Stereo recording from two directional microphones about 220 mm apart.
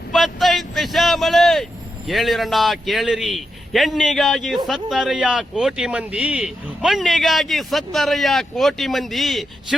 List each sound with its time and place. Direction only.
0.1 s vehicle: centre (ahead or behind)
2.0 s a man's voice: centre (ahead or behind)